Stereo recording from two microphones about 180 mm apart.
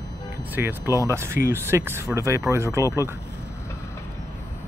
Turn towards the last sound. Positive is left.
turn(degrees=-15)  # may be behind; listen again after turning